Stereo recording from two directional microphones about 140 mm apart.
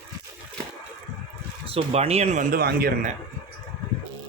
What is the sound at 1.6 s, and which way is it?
Speech, 45° right (ahead or behind).